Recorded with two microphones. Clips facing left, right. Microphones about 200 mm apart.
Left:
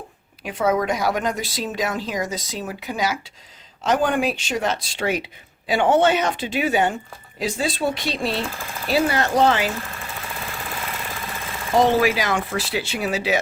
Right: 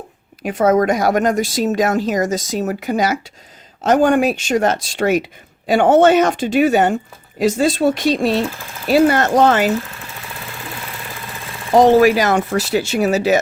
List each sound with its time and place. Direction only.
0.4 s speech: 45° right (ahead or behind)
11.9 s speech: 45° right (ahead or behind)